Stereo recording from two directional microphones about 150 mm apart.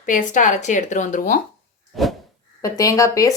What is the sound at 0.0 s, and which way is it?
Speech, 60° left (ahead or behind).